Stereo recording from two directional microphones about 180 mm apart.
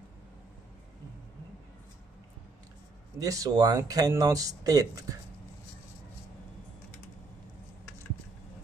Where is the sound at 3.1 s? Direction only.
20° right (ahead or behind).